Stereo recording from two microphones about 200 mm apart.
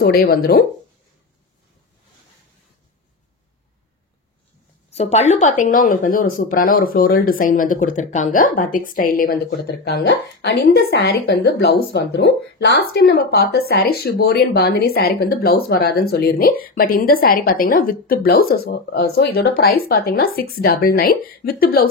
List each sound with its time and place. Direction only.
0.0 s speech: 50° left (ahead or behind)
4.9 s speech: 35° left (ahead or behind); by 21.8 s 50° left (ahead or behind)